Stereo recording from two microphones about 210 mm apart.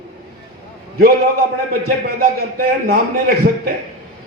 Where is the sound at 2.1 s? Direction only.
45° right (ahead or behind).